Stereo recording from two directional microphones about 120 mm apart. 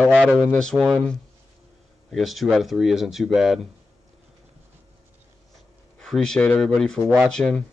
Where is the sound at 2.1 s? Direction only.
Centre (ahead or behind).